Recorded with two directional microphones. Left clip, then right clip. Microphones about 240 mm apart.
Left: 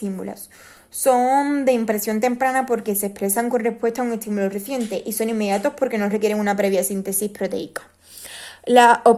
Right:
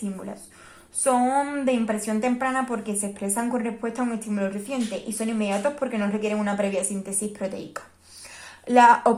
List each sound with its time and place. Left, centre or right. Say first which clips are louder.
1.0 s a woman's voice: left 5 dB; left